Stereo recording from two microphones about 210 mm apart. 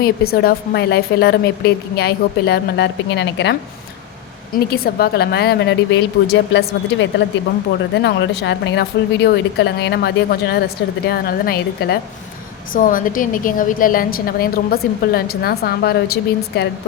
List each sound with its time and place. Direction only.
0.0 s speech: 50° left (ahead or behind)
4.5 s speech: 45° left (ahead or behind)